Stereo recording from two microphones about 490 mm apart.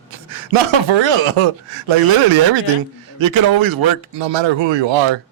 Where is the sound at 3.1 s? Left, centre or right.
Right.